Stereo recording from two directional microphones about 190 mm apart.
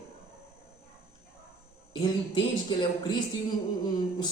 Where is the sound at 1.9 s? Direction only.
25° left (ahead or behind).